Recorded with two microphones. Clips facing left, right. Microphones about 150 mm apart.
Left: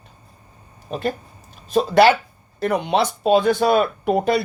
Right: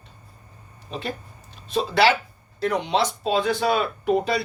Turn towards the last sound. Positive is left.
turn(degrees=50)  # may be behind; listen again after turning